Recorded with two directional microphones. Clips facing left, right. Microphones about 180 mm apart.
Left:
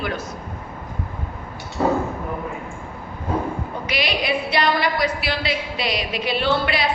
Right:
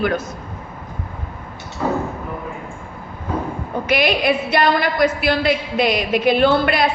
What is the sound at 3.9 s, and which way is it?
A woman's voice, 50° right (ahead or behind).